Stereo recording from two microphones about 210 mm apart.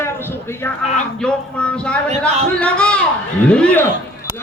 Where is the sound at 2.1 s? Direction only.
35° right (ahead or behind).